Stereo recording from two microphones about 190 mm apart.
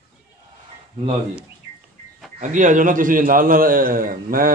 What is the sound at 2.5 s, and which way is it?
A man's voice, 40° right (ahead or behind).